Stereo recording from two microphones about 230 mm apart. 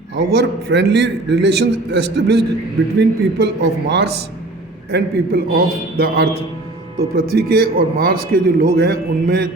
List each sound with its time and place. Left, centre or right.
0.3 s a man's voice: right